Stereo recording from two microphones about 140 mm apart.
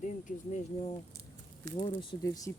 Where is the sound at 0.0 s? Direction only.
65° left (ahead or behind).